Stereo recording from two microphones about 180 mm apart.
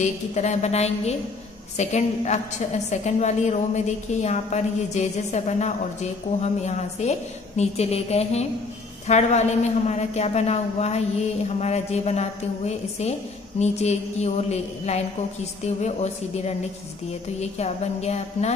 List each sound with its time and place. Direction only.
0.0 s a woman's voice: 40° left (ahead or behind)